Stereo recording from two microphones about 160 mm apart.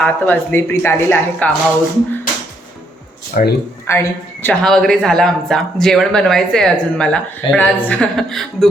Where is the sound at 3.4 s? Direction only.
55° left (ahead or behind).